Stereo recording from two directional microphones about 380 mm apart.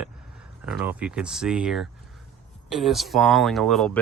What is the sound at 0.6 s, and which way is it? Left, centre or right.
Speech, centre.